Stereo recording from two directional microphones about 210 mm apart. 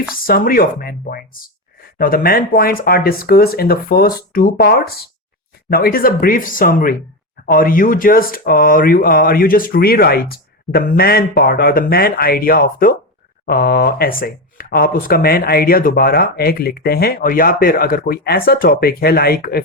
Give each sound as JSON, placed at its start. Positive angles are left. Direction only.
{"t": 0.1, "sound": "speech", "side_deg": 45}